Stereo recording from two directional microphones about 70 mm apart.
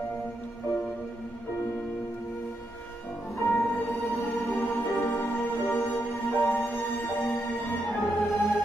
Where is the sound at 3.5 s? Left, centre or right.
Left.